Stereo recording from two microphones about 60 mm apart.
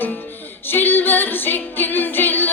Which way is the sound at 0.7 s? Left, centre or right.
Left.